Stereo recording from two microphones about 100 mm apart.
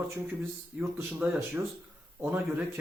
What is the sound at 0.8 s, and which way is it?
Speech, 20° right (ahead or behind).